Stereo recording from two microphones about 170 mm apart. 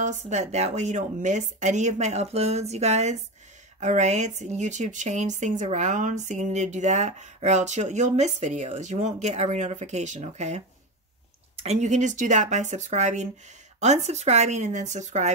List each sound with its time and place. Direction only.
0.0 s speech: 45° right (ahead or behind)